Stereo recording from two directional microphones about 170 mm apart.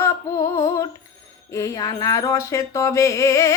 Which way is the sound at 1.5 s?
20° left (ahead or behind).